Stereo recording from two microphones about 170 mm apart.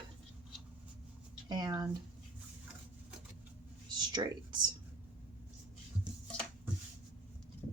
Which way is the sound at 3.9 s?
25° right (ahead or behind).